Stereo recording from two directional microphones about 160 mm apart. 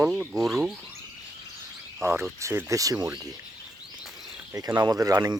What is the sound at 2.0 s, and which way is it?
Speech, 15° right (ahead or behind).